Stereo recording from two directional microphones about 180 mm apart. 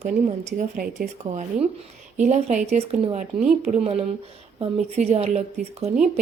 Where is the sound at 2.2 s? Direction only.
40° right (ahead or behind).